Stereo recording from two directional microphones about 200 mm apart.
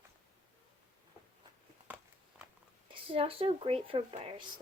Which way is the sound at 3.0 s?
30° right (ahead or behind).